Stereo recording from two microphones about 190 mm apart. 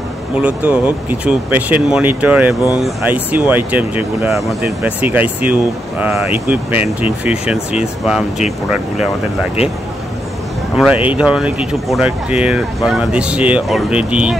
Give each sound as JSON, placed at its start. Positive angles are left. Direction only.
{"t": 0.4, "sound": "speech", "side_deg": -10}
{"t": 10.8, "sound": "speech", "side_deg": -10}